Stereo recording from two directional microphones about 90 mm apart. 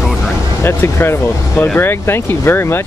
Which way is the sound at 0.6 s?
25° left (ahead or behind).